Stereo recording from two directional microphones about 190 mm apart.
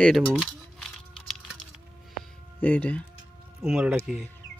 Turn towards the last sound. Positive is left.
turn(degrees=-5)  # may be behind; listen again after turning